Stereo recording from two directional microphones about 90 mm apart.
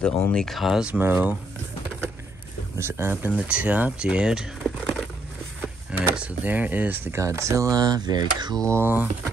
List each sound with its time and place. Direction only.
0.0 s speech: 10° left (ahead or behind)
0.9 s speech: 25° right (ahead or behind)
2.8 s speech: 25° right (ahead or behind); by 4.5 s 10° right (ahead or behind)
4.6 s a sound: 5° left (ahead or behind)
6.1 s speech: 20° right (ahead or behind)
7.2 s speech: 35° right (ahead or behind); by 8.6 s 50° right (ahead or behind)
8.6 s speech: 25° right (ahead or behind)